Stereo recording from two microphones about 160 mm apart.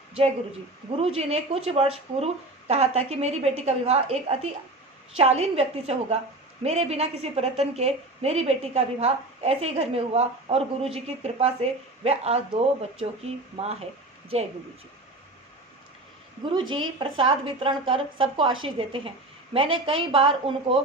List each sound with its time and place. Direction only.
0.9 s a woman's voice: 40° right (ahead or behind)
16.5 s a woman's voice: 30° right (ahead or behind)